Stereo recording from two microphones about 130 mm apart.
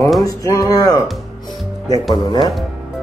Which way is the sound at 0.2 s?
25° left (ahead or behind).